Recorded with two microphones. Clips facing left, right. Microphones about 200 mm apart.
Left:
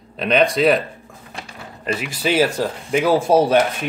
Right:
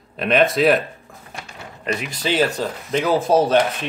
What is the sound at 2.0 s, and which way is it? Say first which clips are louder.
Speech: left 2 dB; 10° left (ahead or behind).